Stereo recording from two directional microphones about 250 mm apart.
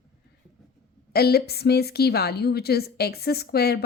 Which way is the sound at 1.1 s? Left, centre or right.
Left.